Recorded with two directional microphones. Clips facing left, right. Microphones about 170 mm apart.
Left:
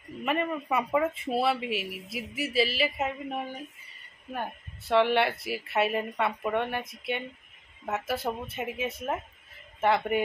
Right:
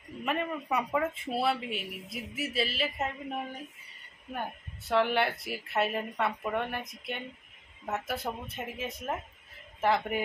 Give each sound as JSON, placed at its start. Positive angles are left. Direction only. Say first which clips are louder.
{"t": 0.2, "sound": "speech", "louder": "left 3 dB", "side_deg": 0}
{"t": 4.3, "sound": "speech", "louder": "left 2 dB", "side_deg": 0}